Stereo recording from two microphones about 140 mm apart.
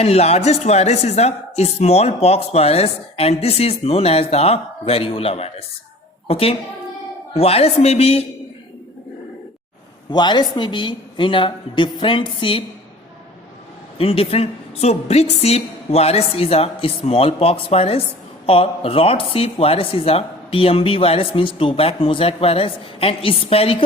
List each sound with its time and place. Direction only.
0.0 s a woman's voice: 45° left (ahead or behind)
10.1 s speech: 30° left (ahead or behind)
14.0 s speech: 45° left (ahead or behind)